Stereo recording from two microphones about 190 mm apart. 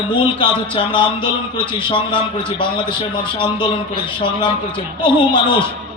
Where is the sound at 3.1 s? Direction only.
25° left (ahead or behind).